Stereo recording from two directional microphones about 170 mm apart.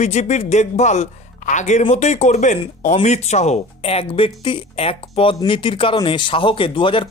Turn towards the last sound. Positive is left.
turn(degrees=30)  # may be behind; listen again after turning